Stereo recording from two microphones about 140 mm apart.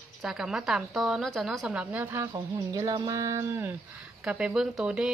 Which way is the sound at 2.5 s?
25° right (ahead or behind).